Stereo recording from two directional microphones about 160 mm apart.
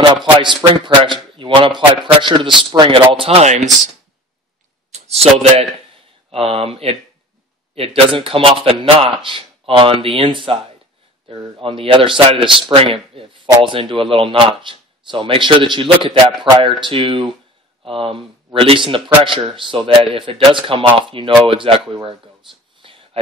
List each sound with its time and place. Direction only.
0.2 s a man's voice: 30° right (ahead or behind)
4.9 s a man's voice: 40° right (ahead or behind)
22.8 s a sound: 30° right (ahead or behind)